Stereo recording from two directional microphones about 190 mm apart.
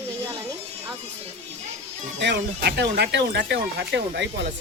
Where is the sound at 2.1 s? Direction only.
65° right (ahead or behind).